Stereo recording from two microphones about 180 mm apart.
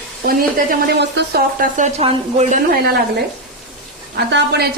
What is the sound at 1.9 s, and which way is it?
Speech, 35° right (ahead or behind).